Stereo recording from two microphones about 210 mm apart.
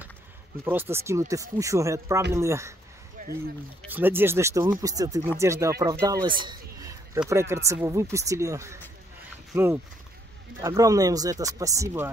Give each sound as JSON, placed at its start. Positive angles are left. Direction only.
{"t": 0.7, "sound": "speech", "side_deg": -10}
{"t": 3.2, "sound": "speech", "side_deg": -45}
{"t": 3.9, "sound": "speech", "side_deg": -10}
{"t": 6.4, "sound": "a sound", "side_deg": -15}
{"t": 7.2, "sound": "speech", "side_deg": -15}